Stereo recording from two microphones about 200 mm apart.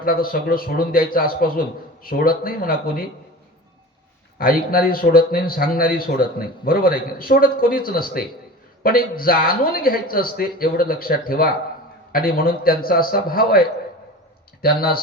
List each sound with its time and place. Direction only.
0.0 s a man's voice: 45° left (ahead or behind)
4.4 s a man's voice: 45° left (ahead or behind)